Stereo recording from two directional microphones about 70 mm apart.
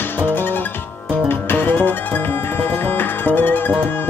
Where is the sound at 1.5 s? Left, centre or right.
Left.